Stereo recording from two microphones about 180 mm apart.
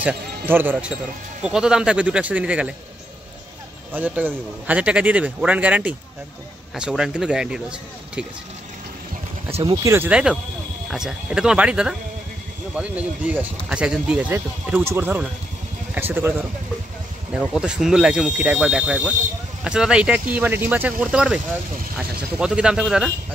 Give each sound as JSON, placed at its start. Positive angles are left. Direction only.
{"t": 0.0, "sound": "speech", "side_deg": -10}
{"t": 3.9, "sound": "speech", "side_deg": -10}
{"t": 9.5, "sound": "speech", "side_deg": -30}
{"t": 9.8, "sound": "speech", "side_deg": -10}